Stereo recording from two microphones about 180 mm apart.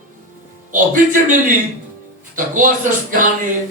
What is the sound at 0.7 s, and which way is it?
Speech, 45° right (ahead or behind).